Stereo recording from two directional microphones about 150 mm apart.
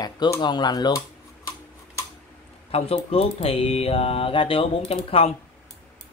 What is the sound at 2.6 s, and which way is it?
Mantra, 40° left (ahead or behind).